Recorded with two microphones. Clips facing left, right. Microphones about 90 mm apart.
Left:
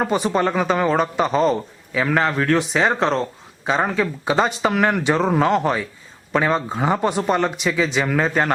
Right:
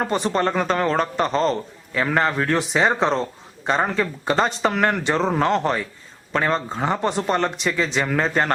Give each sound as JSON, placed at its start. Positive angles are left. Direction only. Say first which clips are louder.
{"t": 0.0, "sound": "a man's voice", "louder": "left 2 dB", "side_deg": 5}